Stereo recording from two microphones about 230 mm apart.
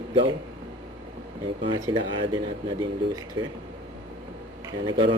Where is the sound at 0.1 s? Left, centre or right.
Right.